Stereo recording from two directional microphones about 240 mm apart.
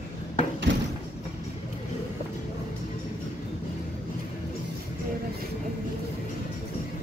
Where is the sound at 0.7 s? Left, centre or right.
Right.